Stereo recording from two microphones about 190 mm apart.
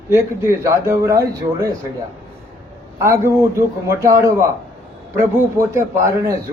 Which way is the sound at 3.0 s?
15° right (ahead or behind).